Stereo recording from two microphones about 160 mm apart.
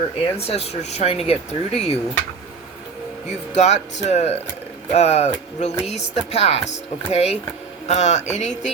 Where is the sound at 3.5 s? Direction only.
45° left (ahead or behind).